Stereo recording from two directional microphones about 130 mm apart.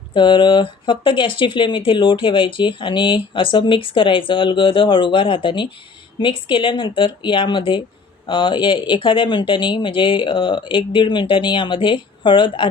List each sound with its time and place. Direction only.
0.1 s speech: 35° left (ahead or behind)